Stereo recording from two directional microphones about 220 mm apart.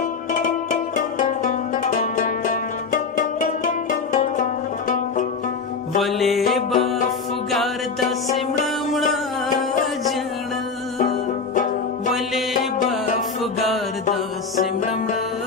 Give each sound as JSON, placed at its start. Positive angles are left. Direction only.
{"t": 0.4, "sound": "music", "side_deg": 35}
{"t": 6.0, "sound": "music", "side_deg": 0}
{"t": 11.5, "sound": "banjo", "side_deg": 35}